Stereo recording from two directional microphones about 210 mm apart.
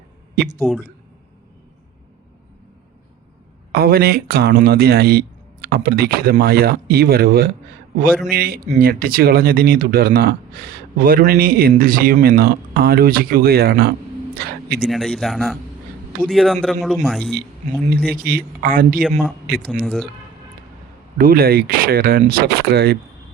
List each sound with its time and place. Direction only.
0.4 s a man's voice: 50° right (ahead or behind)
3.7 s a man's voice: 45° right (ahead or behind)
14.8 s a man's voice: centre (ahead or behind)
18.2 s a man's voice: 45° right (ahead or behind)
19.8 s a man's voice: centre (ahead or behind)
21.2 s a man's voice: 45° right (ahead or behind)